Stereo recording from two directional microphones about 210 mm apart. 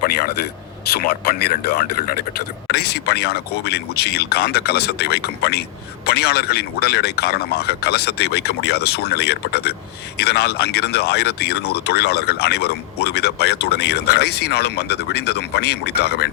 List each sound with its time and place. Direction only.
1.2 s speech: 45° left (ahead or behind)